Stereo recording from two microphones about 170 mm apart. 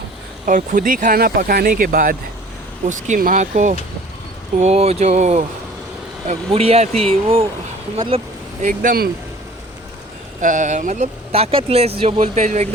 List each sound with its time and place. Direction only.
0.4 s speech: 50° right (ahead or behind); by 7.4 s 35° right (ahead or behind)
8.6 s speech: 50° right (ahead or behind)
10.4 s speech: 50° right (ahead or behind)